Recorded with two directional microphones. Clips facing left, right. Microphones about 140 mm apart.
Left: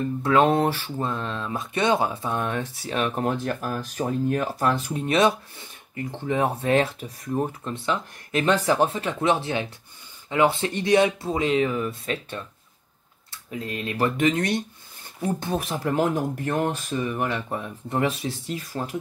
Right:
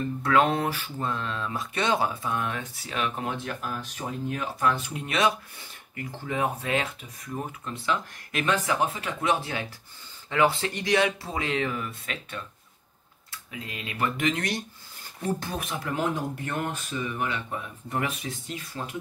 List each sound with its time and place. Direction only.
0.2 s speech: 25° left (ahead or behind)
13.5 s speech: 40° left (ahead or behind)